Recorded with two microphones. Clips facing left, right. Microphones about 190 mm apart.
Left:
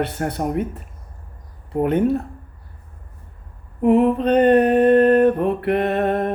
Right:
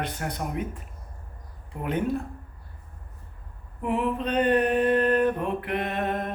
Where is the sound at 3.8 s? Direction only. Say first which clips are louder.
Left 11 dB; 45° left (ahead or behind).